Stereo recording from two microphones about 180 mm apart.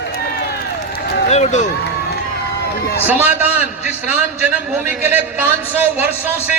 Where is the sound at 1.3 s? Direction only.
40° left (ahead or behind).